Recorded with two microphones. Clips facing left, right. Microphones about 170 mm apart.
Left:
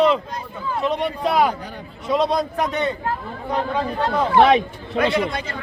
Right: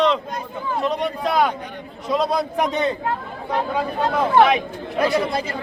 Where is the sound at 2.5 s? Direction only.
20° right (ahead or behind).